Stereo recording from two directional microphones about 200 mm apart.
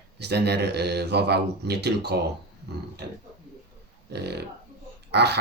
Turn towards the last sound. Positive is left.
turn(degrees=-55)  # may be behind; listen again after turning